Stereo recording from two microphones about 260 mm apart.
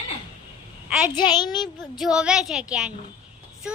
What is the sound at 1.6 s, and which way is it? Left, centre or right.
A child's voice, centre.